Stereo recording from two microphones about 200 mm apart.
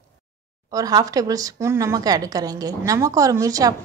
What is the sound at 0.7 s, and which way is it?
Speech, 20° right (ahead or behind).